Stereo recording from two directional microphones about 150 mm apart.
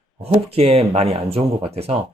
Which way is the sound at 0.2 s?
40° right (ahead or behind).